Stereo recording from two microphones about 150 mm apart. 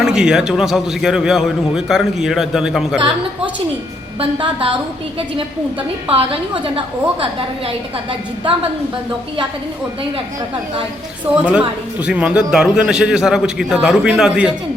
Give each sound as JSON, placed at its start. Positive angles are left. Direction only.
{"t": 0.0, "sound": "a man's voice", "side_deg": -5}
{"t": 4.2, "sound": "a woman's voice", "side_deg": -35}
{"t": 6.1, "sound": "a woman's voice", "side_deg": -35}
{"t": 11.3, "sound": "a woman's voice", "side_deg": -10}